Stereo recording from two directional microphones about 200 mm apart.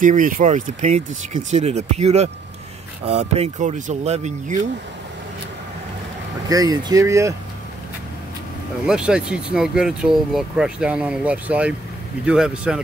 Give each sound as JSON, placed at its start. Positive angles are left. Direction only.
{"t": 0.0, "sound": "speech", "side_deg": -40}
{"t": 6.5, "sound": "speech", "side_deg": -20}
{"t": 8.8, "sound": "speech", "side_deg": -5}